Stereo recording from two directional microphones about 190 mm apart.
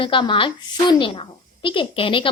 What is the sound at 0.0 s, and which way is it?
A woman's voice, 25° left (ahead or behind).